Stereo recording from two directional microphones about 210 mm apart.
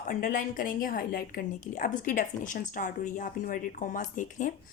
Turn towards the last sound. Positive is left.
turn(degrees=40)  # may be behind; listen again after turning